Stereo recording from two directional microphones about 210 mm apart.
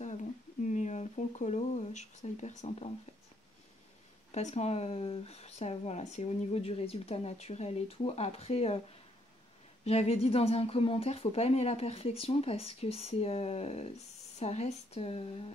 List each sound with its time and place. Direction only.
0.0 s a sound: 35° left (ahead or behind)
4.3 s speech: 35° left (ahead or behind)
9.8 s speech: 30° left (ahead or behind)